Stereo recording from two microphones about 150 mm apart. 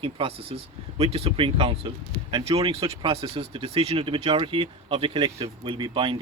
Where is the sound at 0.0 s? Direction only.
40° right (ahead or behind).